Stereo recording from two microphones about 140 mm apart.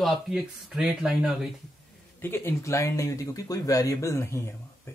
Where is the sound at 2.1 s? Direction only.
15° left (ahead or behind).